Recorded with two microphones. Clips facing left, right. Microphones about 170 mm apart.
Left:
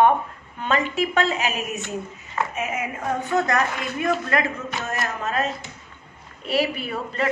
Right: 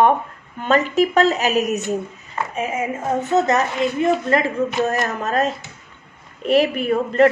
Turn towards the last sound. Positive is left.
turn(degrees=-50)  # may be behind; listen again after turning